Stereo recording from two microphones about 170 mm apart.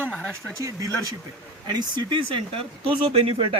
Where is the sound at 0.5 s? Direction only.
20° right (ahead or behind).